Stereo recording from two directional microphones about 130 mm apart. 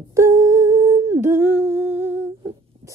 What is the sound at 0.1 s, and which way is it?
Humming, 20° right (ahead or behind).